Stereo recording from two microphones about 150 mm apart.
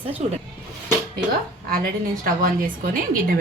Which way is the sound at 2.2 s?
65° right (ahead or behind).